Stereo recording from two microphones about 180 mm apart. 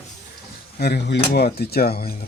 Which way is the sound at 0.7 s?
65° left (ahead or behind).